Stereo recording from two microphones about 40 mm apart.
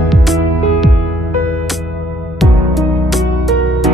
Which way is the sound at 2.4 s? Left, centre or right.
Centre.